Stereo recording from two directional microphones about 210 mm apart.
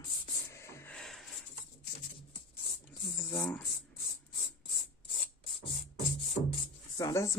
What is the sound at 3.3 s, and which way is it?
Speech, 5° left (ahead or behind).